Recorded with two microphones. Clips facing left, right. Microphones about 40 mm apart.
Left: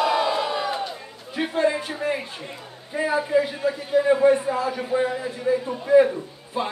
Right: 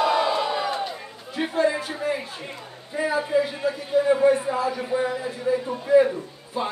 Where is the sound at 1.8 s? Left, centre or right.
Left.